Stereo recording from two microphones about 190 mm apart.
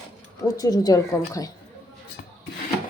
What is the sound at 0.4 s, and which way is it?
Speech, 20° left (ahead or behind).